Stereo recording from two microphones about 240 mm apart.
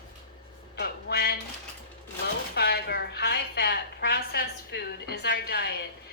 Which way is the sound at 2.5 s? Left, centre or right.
Left.